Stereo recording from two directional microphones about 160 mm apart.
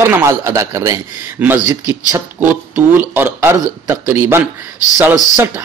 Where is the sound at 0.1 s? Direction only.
15° right (ahead or behind).